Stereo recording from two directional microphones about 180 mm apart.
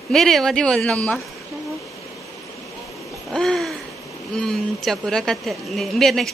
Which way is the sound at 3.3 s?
Centre (ahead or behind).